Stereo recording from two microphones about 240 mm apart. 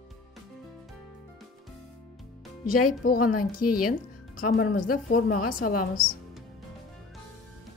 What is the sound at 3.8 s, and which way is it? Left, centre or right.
A woman's voice, left.